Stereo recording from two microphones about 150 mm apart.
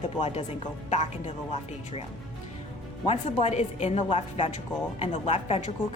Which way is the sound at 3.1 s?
45° left (ahead or behind).